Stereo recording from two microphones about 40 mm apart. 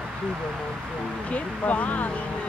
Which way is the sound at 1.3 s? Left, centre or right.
Left.